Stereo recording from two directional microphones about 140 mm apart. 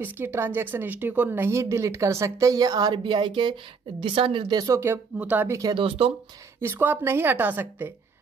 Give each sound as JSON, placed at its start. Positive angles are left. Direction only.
{"t": 0.0, "sound": "a woman's voice", "side_deg": -15}
{"t": 5.8, "sound": "speech", "side_deg": -40}
{"t": 6.6, "sound": "a woman's voice", "side_deg": -15}